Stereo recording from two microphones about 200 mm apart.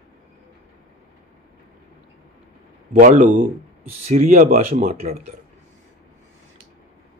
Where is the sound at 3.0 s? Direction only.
40° right (ahead or behind).